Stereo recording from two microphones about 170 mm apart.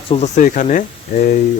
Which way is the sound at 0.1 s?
45° left (ahead or behind).